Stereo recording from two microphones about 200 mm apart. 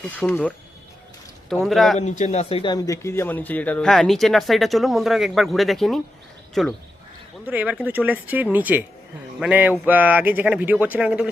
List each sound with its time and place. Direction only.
0.0 s speech: 10° left (ahead or behind)
1.6 s speech: centre (ahead or behind)
2.0 s speech: 35° left (ahead or behind); by 11.3 s 5° right (ahead or behind)